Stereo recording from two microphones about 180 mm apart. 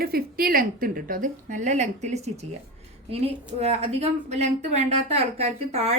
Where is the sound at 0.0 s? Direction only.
55° right (ahead or behind).